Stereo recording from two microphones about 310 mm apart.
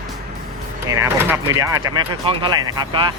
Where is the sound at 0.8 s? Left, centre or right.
Centre.